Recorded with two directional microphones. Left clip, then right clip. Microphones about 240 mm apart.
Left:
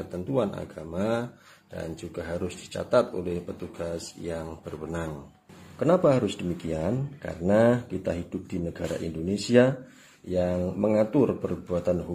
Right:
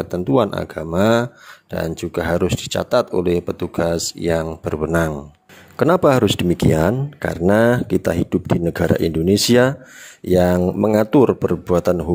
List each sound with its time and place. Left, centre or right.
0.0 s speech: right